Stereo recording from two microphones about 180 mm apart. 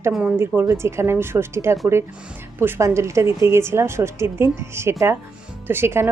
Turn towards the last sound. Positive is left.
turn(degrees=-15)  # may be behind; listen again after turning